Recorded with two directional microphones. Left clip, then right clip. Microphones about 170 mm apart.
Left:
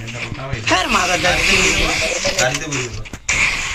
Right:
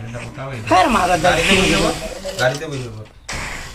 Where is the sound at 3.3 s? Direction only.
15° left (ahead or behind).